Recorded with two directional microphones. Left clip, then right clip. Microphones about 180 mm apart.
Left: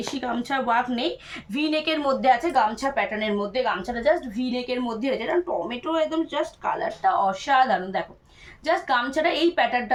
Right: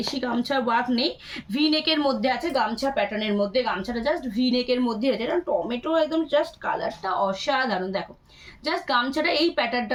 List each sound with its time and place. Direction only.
0.2 s speech: 20° left (ahead or behind)